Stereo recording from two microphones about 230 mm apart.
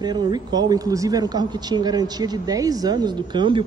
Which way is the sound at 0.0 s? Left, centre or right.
Centre.